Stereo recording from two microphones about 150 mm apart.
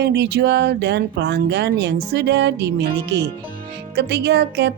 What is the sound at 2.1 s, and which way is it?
Speech, 90° right.